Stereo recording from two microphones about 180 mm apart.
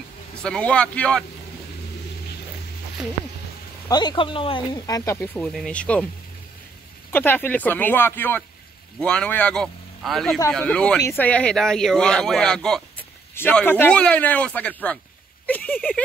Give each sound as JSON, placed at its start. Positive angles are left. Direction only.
{"t": 0.4, "sound": "speech", "side_deg": 5}
{"t": 3.9, "sound": "speech", "side_deg": 25}
{"t": 7.1, "sound": "speech", "side_deg": 10}